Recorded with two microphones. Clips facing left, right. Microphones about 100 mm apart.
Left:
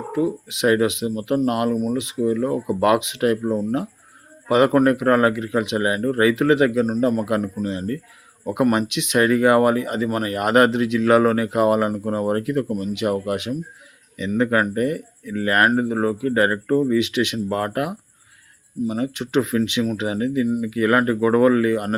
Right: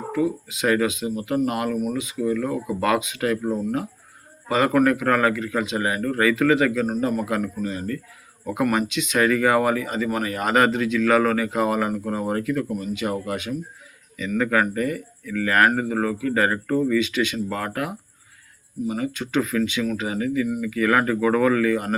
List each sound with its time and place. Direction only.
0.1 s speech: 25° left (ahead or behind)